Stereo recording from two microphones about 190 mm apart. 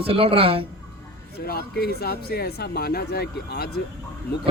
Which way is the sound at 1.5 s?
55° left (ahead or behind).